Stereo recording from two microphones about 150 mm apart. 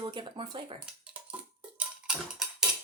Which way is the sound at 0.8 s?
5° right (ahead or behind).